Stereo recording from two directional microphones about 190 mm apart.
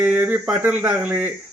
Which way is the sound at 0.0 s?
10° right (ahead or behind).